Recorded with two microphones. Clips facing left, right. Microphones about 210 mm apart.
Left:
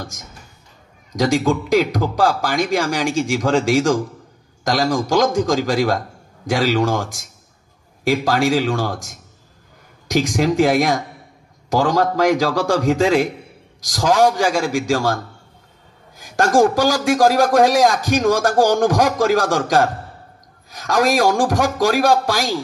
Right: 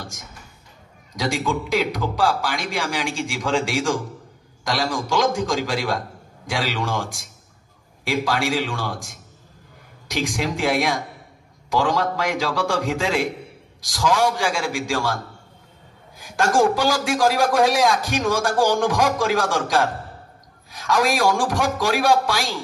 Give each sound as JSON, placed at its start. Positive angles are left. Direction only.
{"t": 0.0, "sound": "a man's voice", "side_deg": 45}
{"t": 16.2, "sound": "a man's voice", "side_deg": 40}